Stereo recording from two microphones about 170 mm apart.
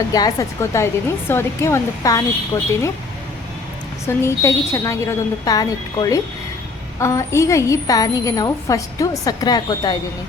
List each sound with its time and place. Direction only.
0.1 s a woman's voice: 20° left (ahead or behind)
4.0 s a woman's voice: 15° left (ahead or behind)